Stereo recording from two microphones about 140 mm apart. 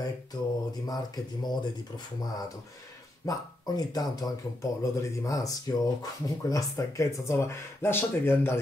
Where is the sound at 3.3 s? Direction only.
25° left (ahead or behind).